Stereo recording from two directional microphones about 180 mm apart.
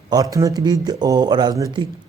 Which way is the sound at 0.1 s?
20° right (ahead or behind).